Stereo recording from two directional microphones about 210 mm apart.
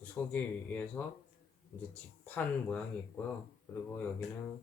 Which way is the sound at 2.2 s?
5° left (ahead or behind).